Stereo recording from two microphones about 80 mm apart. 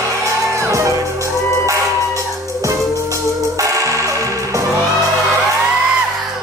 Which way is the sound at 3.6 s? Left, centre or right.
Right.